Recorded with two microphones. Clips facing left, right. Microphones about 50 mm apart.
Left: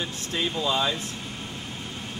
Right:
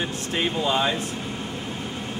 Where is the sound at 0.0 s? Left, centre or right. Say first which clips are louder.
Right 3 dB; right.